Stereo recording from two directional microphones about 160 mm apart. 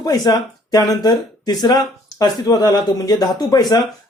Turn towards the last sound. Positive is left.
turn(degrees=25)  # may be behind; listen again after turning